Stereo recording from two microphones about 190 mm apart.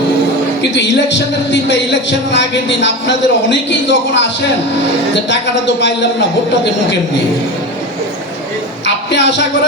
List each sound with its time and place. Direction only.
0.7 s speech: 70° left (ahead or behind)
5.3 s speech: 65° left (ahead or behind)
9.1 s a man's voice: 65° left (ahead or behind)